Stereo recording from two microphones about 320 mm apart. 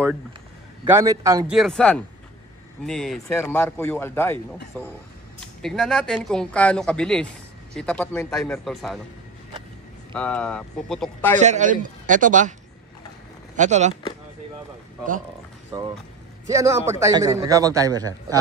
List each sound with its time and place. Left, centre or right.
0.8 s a man's voice: centre
10.1 s speech: centre
11.3 s a man's voice: right
13.6 s a man's voice: right
16.4 s a man's voice: centre